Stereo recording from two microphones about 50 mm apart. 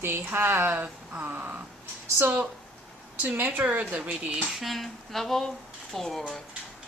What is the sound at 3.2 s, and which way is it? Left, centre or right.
Speech, right.